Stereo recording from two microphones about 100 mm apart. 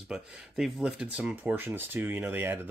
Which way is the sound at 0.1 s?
5° right (ahead or behind).